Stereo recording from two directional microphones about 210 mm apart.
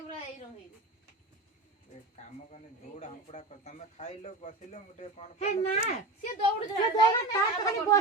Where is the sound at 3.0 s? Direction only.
35° left (ahead or behind).